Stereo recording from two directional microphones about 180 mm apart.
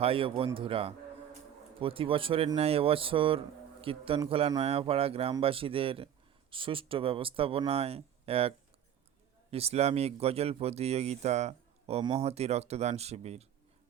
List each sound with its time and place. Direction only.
0.0 s speech: 30° right (ahead or behind)